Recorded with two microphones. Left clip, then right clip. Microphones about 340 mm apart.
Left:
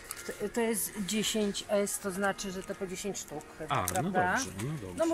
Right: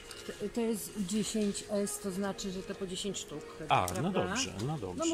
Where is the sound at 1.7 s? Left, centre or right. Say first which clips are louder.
Left 4 dB; left.